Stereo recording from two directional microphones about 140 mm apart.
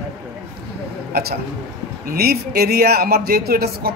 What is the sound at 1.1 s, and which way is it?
A man's voice, 90° right.